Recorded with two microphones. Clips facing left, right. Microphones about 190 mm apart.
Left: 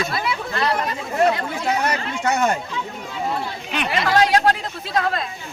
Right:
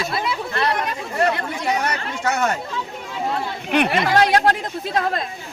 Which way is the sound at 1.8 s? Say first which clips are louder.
Left 1 dB; 10° left (ahead or behind).